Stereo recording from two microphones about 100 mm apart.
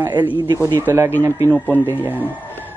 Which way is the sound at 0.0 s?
20° right (ahead or behind).